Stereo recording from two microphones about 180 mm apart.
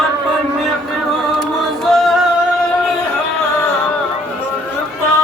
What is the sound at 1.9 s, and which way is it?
Music, centre (ahead or behind).